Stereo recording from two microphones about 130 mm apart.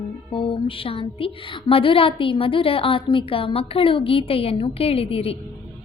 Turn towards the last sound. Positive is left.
turn(degrees=50)  # may be behind; listen again after turning